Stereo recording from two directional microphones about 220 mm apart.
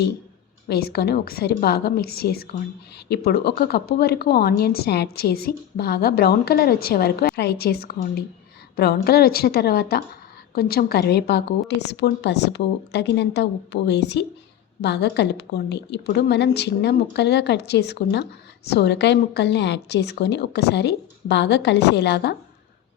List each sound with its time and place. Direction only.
0.7 s speech: 45° left (ahead or behind)